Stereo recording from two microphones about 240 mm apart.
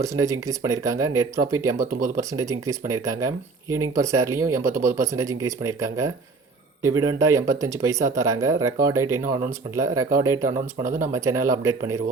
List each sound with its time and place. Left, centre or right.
0.0 s speech: centre
10.8 s speech: right
11.1 s speech: centre